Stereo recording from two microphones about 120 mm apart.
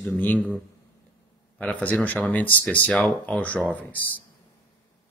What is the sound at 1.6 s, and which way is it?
Speech, 10° left (ahead or behind).